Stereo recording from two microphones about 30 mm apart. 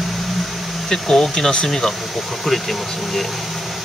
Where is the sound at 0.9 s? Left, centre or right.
Centre.